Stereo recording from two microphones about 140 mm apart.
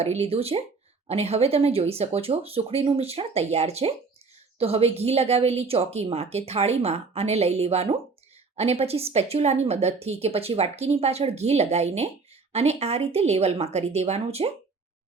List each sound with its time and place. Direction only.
0.0 s speech: 50° right (ahead or behind)